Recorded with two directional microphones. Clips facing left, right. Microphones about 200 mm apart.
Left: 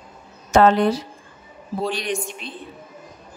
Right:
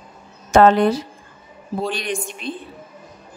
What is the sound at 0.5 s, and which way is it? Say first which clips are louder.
Speech: right 2 dB; 50° right (ahead or behind).